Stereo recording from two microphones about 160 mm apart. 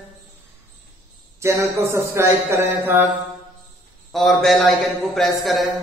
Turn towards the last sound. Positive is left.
turn(degrees=0)  # may be behind; listen again after turning